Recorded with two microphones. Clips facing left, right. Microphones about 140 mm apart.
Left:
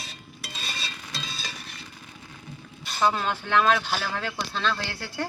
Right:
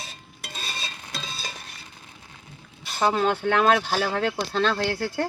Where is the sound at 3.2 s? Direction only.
50° right (ahead or behind).